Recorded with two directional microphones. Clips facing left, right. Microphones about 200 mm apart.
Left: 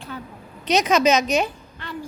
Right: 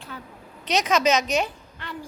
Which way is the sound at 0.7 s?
10° left (ahead or behind).